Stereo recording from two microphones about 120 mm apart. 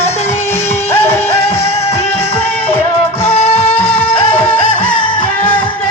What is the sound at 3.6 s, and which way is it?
Music, 15° left (ahead or behind).